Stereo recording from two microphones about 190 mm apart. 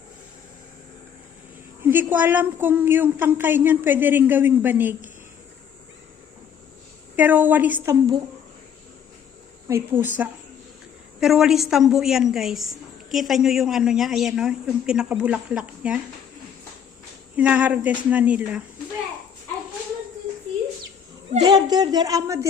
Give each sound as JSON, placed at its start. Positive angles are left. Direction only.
{"t": 1.8, "sound": "a woman's voice", "side_deg": -10}
{"t": 7.2, "sound": "a woman's voice", "side_deg": -10}
{"t": 9.6, "sound": "a woman's voice", "side_deg": -10}
{"t": 17.3, "sound": "a woman's voice", "side_deg": -5}
{"t": 21.4, "sound": "speech", "side_deg": -20}